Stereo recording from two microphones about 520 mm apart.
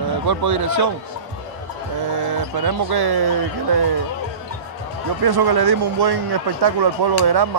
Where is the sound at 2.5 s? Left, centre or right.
Right.